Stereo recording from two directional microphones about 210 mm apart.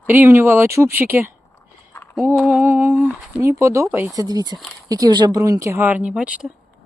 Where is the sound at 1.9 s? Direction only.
10° left (ahead or behind).